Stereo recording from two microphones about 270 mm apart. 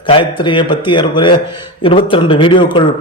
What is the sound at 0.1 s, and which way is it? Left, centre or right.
A man's voice, centre.